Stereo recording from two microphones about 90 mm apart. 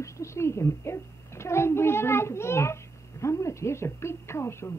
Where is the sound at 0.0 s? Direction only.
30° left (ahead or behind).